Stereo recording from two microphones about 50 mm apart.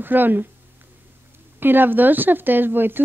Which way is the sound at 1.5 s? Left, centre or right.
Right.